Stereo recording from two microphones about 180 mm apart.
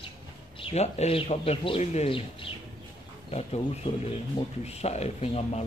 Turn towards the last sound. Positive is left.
turn(degrees=35)  # may be behind; listen again after turning